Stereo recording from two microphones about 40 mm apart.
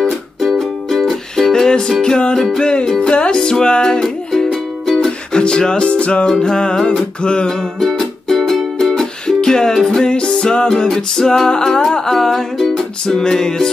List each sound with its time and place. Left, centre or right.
0.4 s music: centre
3.0 s music: left
6.2 s music: centre
7.8 s music: centre
10.0 s music: left
12.7 s music: centre